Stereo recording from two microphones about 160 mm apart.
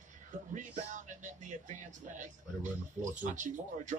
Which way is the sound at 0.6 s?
50° right (ahead or behind).